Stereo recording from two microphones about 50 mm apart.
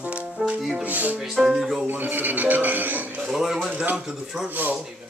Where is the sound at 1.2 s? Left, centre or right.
Centre.